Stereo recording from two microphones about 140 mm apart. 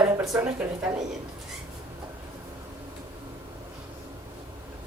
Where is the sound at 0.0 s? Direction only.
25° right (ahead or behind).